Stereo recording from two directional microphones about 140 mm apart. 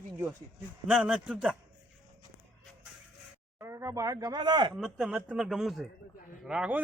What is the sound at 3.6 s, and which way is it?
Speech, 20° right (ahead or behind).